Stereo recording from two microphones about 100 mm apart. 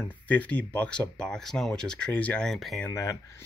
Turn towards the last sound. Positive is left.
turn(degrees=30)  # may be behind; listen again after turning